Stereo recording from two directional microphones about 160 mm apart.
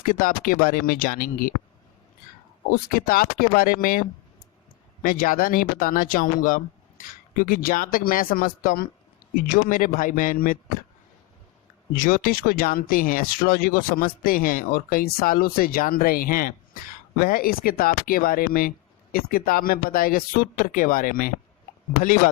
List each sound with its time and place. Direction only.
0.0 s speech: 60° left (ahead or behind)
2.6 s speech: 65° left (ahead or behind)
5.0 s speech: 60° left (ahead or behind)
11.9 s speech: 60° left (ahead or behind)